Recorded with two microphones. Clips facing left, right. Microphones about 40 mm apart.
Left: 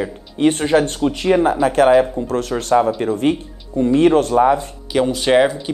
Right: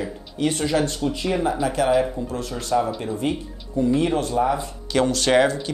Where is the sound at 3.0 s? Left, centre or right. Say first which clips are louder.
Left 7 dB; left.